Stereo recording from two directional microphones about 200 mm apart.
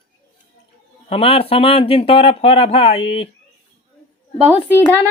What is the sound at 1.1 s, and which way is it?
Speech, 30° left (ahead or behind).